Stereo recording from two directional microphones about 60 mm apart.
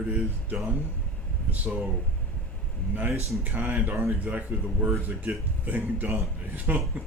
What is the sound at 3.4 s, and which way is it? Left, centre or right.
Speech, right.